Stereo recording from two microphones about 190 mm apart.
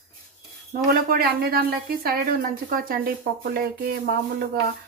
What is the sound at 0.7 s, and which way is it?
Speech, 55° right (ahead or behind).